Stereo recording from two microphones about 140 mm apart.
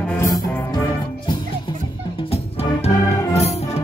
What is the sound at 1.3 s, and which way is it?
Music, 30° left (ahead or behind).